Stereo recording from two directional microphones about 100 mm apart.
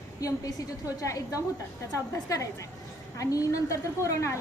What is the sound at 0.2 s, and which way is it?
A woman's voice, 35° left (ahead or behind).